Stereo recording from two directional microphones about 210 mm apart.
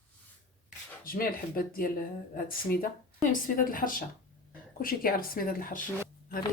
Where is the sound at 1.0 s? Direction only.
45° left (ahead or behind).